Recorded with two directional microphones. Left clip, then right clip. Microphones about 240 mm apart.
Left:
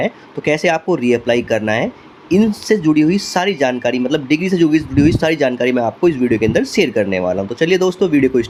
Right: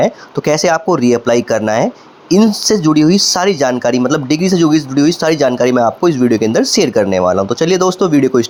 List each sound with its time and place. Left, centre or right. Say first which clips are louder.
0.0 s speech: right 5 dB; right